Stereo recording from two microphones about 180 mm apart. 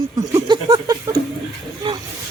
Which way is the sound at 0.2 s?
20° right (ahead or behind).